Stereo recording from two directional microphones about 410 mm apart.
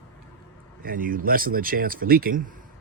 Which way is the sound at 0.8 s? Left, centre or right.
Right.